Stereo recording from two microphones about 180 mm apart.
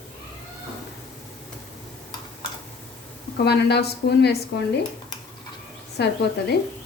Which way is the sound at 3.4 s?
65° left (ahead or behind).